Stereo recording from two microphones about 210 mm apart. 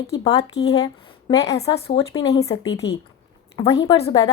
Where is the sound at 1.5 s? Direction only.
30° left (ahead or behind).